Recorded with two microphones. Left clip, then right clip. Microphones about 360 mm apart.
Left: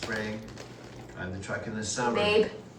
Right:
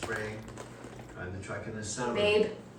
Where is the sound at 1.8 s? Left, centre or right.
Centre.